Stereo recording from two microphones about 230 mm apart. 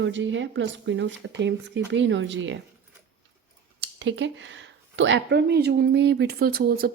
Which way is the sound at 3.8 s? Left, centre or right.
Right.